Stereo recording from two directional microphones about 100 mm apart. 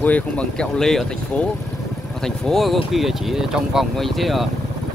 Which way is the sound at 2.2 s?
5° left (ahead or behind).